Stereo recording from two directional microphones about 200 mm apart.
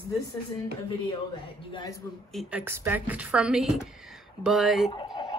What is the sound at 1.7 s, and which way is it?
Speech, 20° left (ahead or behind).